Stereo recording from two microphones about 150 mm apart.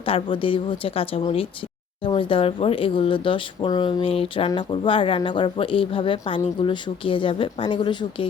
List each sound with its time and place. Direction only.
0.0 s speech: 35° left (ahead or behind)